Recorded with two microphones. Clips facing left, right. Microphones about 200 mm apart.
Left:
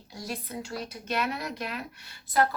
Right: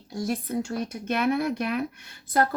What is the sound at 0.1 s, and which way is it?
Speech, 50° right (ahead or behind).